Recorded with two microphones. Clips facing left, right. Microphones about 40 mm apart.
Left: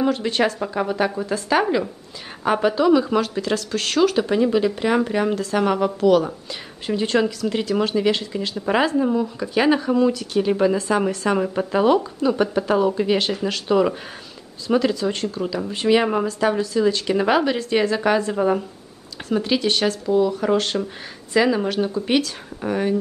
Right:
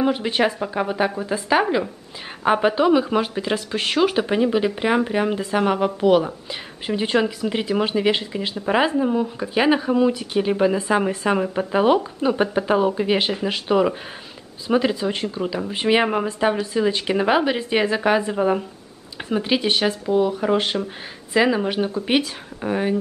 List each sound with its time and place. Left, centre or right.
0.0 s speech: centre
8.5 s speech: centre
9.1 s speech: right